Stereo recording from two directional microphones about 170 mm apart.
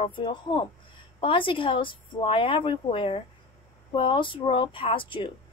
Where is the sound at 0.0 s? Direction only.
30° left (ahead or behind).